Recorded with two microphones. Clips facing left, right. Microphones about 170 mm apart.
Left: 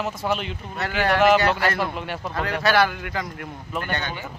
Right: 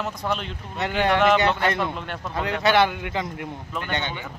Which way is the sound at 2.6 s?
20° right (ahead or behind).